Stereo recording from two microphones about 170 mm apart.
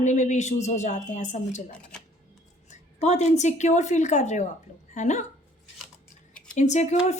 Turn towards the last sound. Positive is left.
turn(degrees=40)  # may be behind; listen again after turning